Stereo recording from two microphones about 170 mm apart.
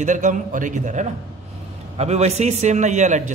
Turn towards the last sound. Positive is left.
turn(degrees=-45)  # may be behind; listen again after turning